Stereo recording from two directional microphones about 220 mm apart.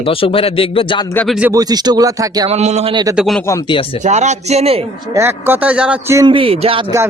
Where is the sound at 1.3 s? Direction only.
10° right (ahead or behind).